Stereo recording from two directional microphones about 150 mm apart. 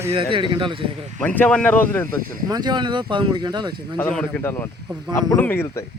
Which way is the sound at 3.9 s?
5° left (ahead or behind).